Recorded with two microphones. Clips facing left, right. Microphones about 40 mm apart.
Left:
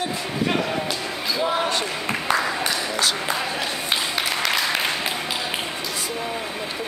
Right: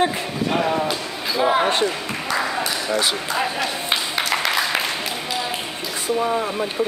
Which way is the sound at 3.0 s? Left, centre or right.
Centre.